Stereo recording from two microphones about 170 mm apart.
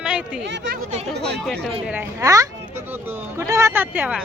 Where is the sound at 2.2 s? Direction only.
20° right (ahead or behind).